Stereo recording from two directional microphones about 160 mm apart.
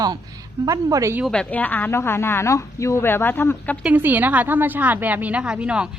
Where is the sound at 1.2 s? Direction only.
5° left (ahead or behind).